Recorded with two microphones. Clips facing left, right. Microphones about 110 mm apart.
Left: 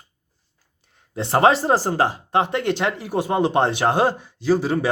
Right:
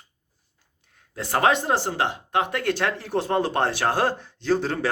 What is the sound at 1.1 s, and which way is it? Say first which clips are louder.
Speech: left 5 dB; 25° left (ahead or behind).